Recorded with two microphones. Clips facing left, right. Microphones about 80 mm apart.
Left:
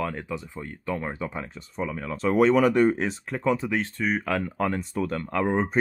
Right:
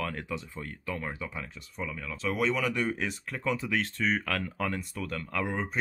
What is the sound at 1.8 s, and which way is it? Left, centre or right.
Speech, left.